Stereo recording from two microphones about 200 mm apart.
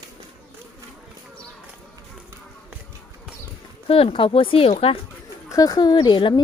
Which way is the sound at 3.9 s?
30° left (ahead or behind).